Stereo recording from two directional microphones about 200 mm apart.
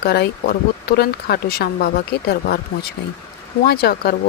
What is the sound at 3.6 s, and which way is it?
Speech, 50° left (ahead or behind).